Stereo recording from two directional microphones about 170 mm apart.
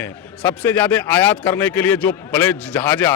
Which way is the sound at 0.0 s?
10° left (ahead or behind).